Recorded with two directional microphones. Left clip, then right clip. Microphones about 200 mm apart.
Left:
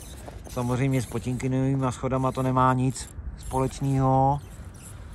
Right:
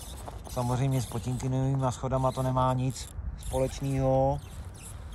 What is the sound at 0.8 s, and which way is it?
Speech, 25° right (ahead or behind).